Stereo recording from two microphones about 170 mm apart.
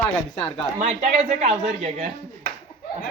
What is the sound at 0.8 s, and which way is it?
Speech, 40° right (ahead or behind).